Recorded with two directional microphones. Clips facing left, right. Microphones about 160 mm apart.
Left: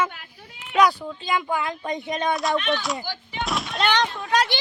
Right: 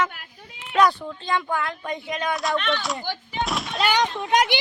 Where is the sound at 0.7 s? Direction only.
5° left (ahead or behind); by 2.3 s 25° left (ahead or behind).